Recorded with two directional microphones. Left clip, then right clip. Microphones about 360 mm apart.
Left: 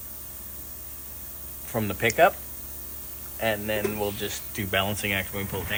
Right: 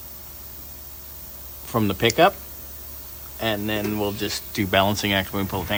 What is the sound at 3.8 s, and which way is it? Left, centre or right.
Speech, right.